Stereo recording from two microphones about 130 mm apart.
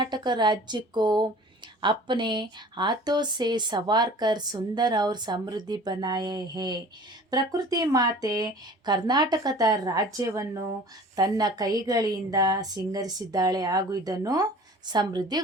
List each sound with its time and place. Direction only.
0.0 s a woman's voice: 35° right (ahead or behind)